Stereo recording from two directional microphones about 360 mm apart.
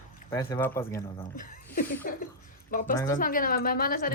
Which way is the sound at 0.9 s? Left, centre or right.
Left.